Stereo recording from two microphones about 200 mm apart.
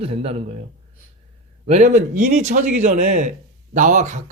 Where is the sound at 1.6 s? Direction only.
40° right (ahead or behind).